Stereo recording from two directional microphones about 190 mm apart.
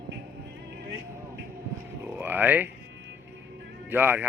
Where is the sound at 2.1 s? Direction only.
10° right (ahead or behind).